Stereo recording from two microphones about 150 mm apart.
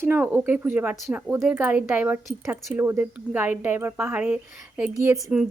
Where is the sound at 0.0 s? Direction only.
15° right (ahead or behind).